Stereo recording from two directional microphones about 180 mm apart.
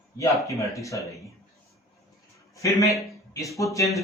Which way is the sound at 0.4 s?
15° left (ahead or behind).